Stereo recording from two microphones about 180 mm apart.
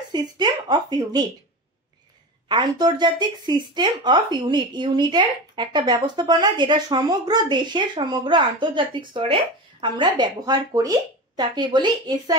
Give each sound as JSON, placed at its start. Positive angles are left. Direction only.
{"t": 0.1, "sound": "speech", "side_deg": -25}
{"t": 2.4, "sound": "speech", "side_deg": -25}